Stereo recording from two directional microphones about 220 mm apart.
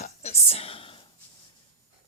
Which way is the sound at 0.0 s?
30° left (ahead or behind).